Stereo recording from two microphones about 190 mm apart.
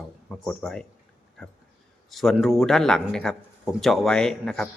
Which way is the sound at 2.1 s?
Centre (ahead or behind).